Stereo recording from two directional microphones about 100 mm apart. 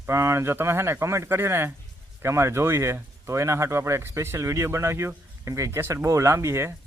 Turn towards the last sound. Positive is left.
turn(degrees=-25)  # may be behind; listen again after turning